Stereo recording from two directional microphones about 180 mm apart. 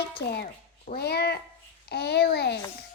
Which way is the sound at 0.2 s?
60° left (ahead or behind).